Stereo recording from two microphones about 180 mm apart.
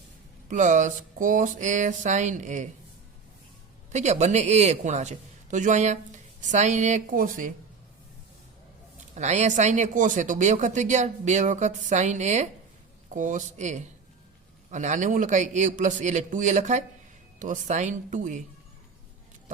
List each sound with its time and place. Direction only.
0.4 s speech: 45° right (ahead or behind)
3.9 s a man's voice: 40° right (ahead or behind)
9.1 s speech: 40° right (ahead or behind)